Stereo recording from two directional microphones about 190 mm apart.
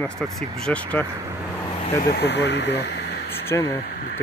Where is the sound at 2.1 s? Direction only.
65° left (ahead or behind).